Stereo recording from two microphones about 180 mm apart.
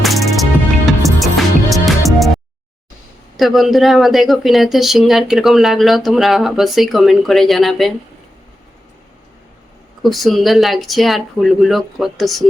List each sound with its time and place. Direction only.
0.0 s music: centre (ahead or behind)
3.3 s speech: centre (ahead or behind)
10.0 s speech: centre (ahead or behind)